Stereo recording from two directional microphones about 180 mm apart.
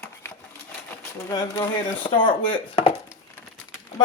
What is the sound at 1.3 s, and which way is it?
Speech, 20° left (ahead or behind).